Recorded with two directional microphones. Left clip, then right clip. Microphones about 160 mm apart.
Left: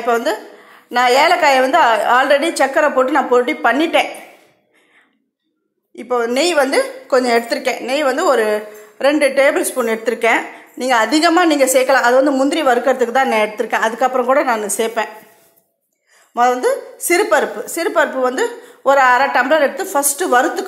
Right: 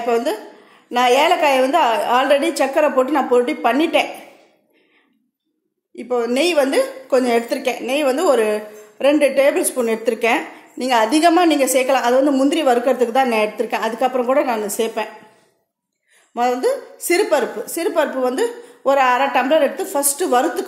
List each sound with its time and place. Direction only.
0.0 s a woman's voice: 10° right (ahead or behind)
5.9 s a woman's voice: 10° right (ahead or behind)
16.3 s a woman's voice: 10° right (ahead or behind)